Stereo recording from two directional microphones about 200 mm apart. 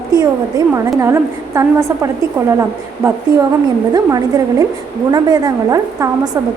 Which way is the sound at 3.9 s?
20° right (ahead or behind).